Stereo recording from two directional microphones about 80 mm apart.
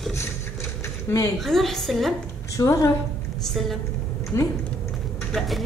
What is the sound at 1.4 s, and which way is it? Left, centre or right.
Speech, centre.